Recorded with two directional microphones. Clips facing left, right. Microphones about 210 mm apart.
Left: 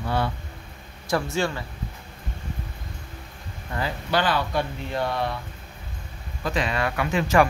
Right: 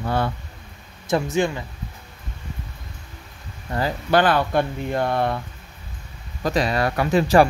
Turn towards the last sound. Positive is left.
turn(degrees=-35)  # may be behind; listen again after turning